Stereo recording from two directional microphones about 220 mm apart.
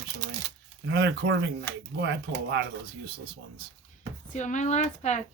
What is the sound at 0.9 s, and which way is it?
Speech, 50° right (ahead or behind).